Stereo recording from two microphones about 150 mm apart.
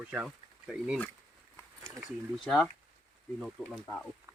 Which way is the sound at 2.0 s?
5° left (ahead or behind).